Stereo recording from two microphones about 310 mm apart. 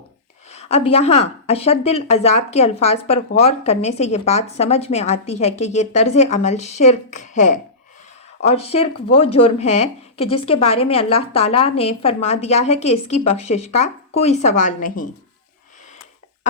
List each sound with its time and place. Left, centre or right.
0.5 s speech: centre